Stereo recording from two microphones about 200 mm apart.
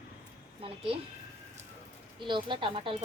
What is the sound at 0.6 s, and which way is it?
Speech, 25° right (ahead or behind).